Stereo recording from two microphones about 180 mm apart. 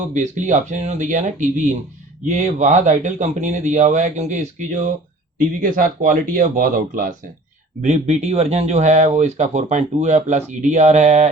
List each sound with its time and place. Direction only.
0.1 s speech: 45° right (ahead or behind)
7.8 s speech: 40° right (ahead or behind)